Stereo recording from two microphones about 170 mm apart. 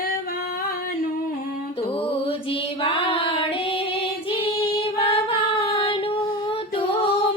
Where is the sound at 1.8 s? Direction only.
35° left (ahead or behind).